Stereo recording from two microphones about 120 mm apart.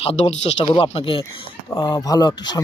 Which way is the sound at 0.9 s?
50° left (ahead or behind).